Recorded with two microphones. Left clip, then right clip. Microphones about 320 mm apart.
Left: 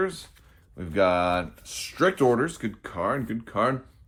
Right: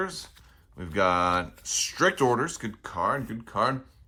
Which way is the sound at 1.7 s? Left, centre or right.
Left.